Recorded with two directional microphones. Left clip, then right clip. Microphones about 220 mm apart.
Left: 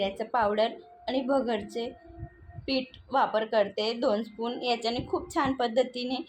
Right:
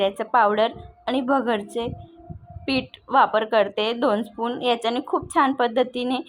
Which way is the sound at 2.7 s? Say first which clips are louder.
Right 6 dB; 30° right (ahead or behind).